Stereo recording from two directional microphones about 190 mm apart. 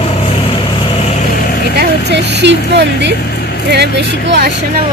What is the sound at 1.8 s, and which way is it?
Speech, 60° right (ahead or behind).